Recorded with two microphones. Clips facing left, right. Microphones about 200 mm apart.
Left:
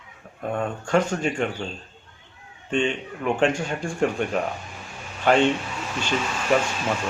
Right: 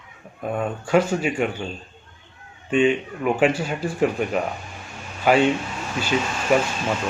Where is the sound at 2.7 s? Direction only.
5° right (ahead or behind).